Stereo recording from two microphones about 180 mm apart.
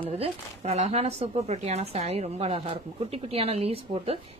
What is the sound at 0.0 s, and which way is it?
A woman's voice, 35° right (ahead or behind).